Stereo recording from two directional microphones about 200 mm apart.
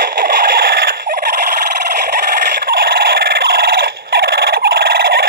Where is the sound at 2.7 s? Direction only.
50° right (ahead or behind).